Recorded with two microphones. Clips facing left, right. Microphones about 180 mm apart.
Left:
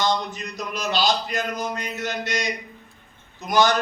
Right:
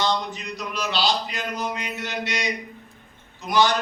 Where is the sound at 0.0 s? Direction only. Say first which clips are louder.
Left 1 dB; 45° left (ahead or behind).